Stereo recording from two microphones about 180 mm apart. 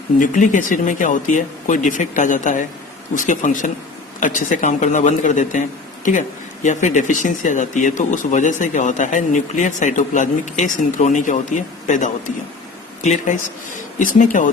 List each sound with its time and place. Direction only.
0.2 s speech: 45° left (ahead or behind)